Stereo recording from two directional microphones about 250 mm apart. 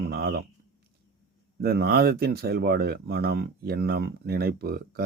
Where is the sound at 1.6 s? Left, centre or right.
Right.